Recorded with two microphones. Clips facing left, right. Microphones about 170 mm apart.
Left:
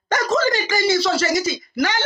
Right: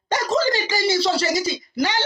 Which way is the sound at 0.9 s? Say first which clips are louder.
Left 1 dB; 35° right (ahead or behind).